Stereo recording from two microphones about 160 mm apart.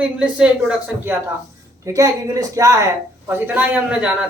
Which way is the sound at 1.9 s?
20° right (ahead or behind).